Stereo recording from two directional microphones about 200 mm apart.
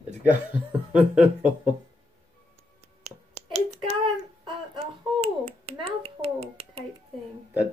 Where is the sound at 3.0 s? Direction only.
30° right (ahead or behind).